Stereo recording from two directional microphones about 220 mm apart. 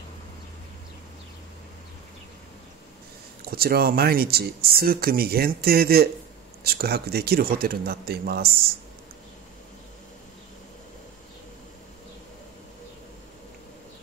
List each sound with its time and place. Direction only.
3.4 s speech: 45° right (ahead or behind)